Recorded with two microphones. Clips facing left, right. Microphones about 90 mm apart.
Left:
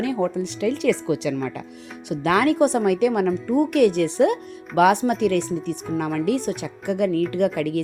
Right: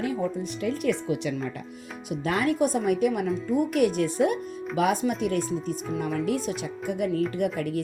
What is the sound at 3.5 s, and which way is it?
Speech, 55° left (ahead or behind).